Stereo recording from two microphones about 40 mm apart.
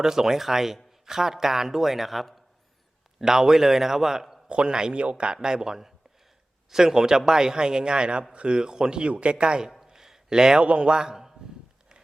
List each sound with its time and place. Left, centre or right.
0.0 s a man's voice: centre
3.2 s a man's voice: centre
4.4 s a man's voice: right
9.6 s a man's voice: centre